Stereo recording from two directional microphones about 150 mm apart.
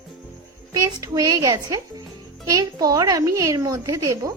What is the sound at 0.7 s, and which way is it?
A woman's voice, 25° right (ahead or behind).